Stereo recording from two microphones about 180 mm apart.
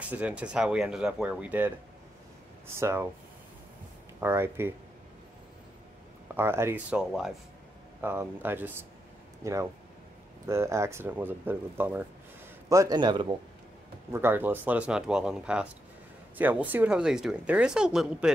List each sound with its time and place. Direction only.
0.1 s speech: 5° right (ahead or behind)
2.7 s speech: 15° right (ahead or behind)
4.2 s speech: 15° right (ahead or behind)
6.3 s a man's voice: 15° right (ahead or behind)
14.1 s speech: 10° right (ahead or behind)